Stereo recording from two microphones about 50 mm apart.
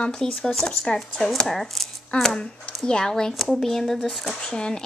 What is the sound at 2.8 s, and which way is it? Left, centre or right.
Speech, centre.